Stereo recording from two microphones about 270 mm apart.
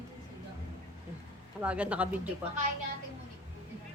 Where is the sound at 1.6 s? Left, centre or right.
Centre.